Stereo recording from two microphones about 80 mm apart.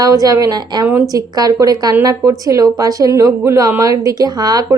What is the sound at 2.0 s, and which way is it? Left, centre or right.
A woman's voice, right.